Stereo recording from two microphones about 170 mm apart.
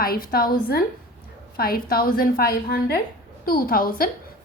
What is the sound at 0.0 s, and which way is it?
A woman's voice, 60° left (ahead or behind).